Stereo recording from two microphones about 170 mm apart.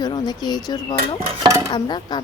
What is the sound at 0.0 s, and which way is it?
Speech, 25° left (ahead or behind).